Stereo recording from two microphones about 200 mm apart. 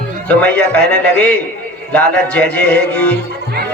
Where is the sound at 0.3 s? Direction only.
5° left (ahead or behind).